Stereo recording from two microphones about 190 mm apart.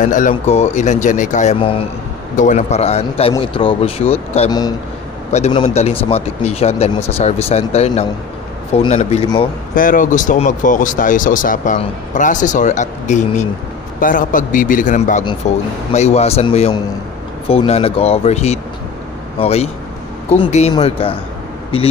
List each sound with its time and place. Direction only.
0.0 s a man's voice: 45° left (ahead or behind)
2.3 s a man's voice: 40° left (ahead or behind); by 4.7 s 20° left (ahead or behind)
5.3 s a man's voice: 35° left (ahead or behind)
9.8 s a man's voice: 45° left (ahead or behind)